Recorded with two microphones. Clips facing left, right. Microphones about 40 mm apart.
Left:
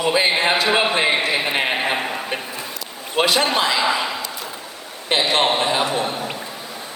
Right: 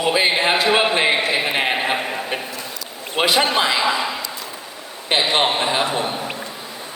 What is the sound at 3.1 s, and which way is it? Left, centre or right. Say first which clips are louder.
Speech: even; centre.